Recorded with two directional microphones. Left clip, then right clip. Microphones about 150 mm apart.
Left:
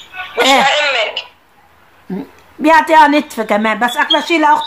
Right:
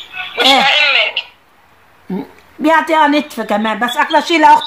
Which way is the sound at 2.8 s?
Centre (ahead or behind).